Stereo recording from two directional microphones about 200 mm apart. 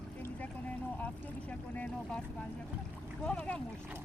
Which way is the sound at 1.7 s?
5° left (ahead or behind).